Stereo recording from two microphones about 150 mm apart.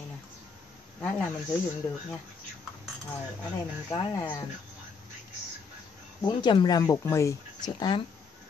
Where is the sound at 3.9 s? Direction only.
20° left (ahead or behind).